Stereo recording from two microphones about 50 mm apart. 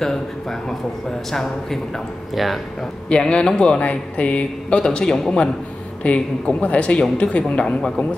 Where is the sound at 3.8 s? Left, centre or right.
Left.